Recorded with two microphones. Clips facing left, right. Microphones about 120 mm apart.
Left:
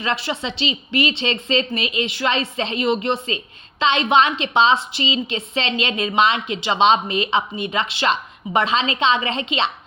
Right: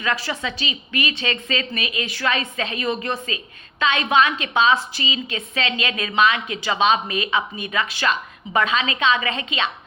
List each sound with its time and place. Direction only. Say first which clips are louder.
0.0 s a woman's voice: left 1 dB; 25° left (ahead or behind)